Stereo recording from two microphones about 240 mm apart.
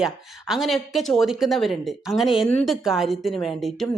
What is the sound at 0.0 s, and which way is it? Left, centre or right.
Speech, centre.